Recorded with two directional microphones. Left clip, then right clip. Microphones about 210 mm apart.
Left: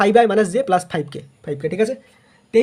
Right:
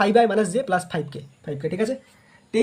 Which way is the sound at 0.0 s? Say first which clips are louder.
Left 4 dB; 35° left (ahead or behind).